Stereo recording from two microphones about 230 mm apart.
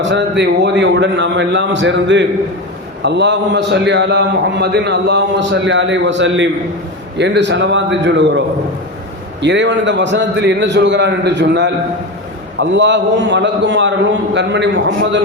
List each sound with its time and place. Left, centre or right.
0.0 s a man's voice: right
9.4 s a man's voice: right